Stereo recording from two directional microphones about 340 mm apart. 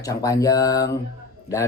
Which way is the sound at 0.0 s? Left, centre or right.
Centre.